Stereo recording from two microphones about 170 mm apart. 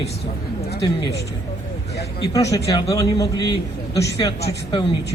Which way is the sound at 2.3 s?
20° left (ahead or behind).